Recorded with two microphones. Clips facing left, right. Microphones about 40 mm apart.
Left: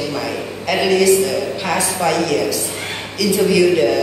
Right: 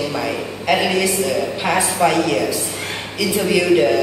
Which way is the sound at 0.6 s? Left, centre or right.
Centre.